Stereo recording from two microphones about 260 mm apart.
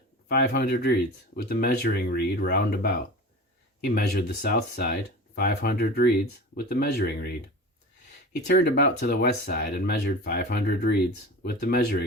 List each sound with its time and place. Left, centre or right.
0.3 s speech: left
8.4 s speech: left